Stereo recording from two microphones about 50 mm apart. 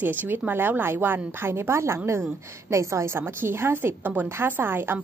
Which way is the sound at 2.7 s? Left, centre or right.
Right.